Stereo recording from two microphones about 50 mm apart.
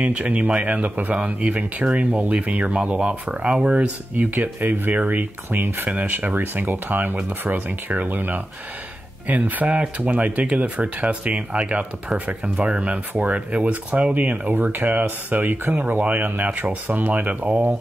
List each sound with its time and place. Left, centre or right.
0.0 s speech: right
4.2 s speech: right
5.9 s speech: right
14.5 s speech: right